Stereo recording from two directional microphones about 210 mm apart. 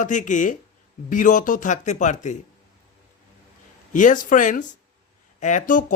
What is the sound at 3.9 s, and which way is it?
Music, 35° left (ahead or behind).